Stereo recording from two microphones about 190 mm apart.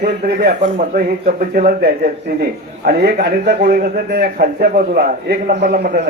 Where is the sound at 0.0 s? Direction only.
60° right (ahead or behind).